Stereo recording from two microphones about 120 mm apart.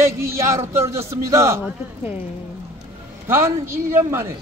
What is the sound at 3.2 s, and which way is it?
A man's voice, 20° right (ahead or behind).